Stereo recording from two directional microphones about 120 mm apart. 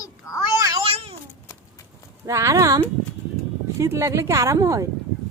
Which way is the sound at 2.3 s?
25° right (ahead or behind).